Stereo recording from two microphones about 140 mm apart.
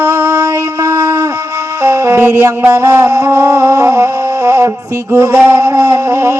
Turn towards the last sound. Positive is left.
turn(degrees=-20)  # may be behind; listen again after turning